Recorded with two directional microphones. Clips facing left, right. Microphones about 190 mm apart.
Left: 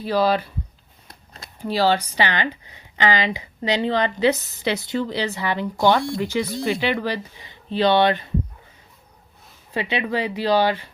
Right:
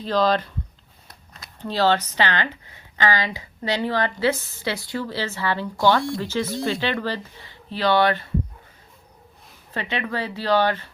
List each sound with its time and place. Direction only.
0.0 s speech: 10° left (ahead or behind)
1.0 s a sound: 30° left (ahead or behind)
1.5 s speech: 10° left (ahead or behind)
9.7 s speech: 15° left (ahead or behind)